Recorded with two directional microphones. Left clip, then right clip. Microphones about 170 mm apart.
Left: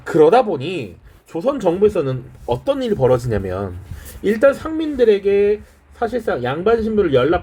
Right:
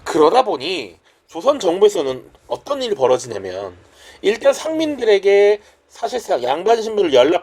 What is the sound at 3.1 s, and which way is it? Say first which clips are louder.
Speech: left 2 dB; 40° right (ahead or behind).